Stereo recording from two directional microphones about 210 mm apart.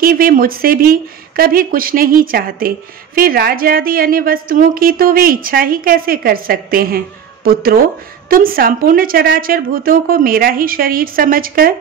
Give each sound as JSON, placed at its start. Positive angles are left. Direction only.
{"t": 0.0, "sound": "a woman's voice", "side_deg": -45}